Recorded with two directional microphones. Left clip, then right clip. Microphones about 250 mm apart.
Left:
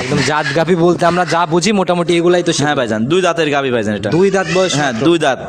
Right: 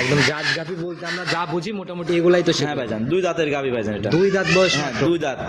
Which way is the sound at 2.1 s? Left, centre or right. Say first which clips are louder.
Right 1 dB; left.